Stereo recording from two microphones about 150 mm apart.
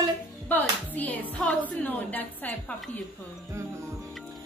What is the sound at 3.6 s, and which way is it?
Music, 20° right (ahead or behind).